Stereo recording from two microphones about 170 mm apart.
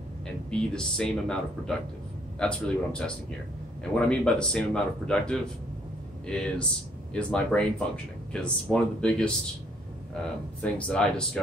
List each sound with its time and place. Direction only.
0.5 s speech: 5° left (ahead or behind)
10.6 s speech: 5° left (ahead or behind)